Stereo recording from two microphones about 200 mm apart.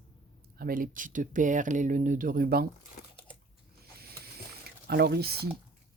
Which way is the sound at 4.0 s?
50° right (ahead or behind).